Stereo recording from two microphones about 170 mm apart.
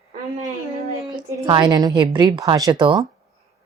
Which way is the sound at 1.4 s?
25° right (ahead or behind).